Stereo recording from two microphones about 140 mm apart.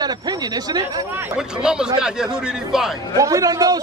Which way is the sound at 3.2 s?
25° right (ahead or behind).